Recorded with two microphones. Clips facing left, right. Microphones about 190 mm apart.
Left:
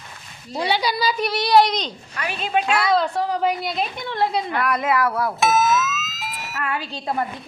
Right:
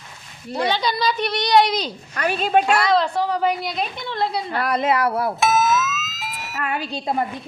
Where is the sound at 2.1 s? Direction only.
45° right (ahead or behind).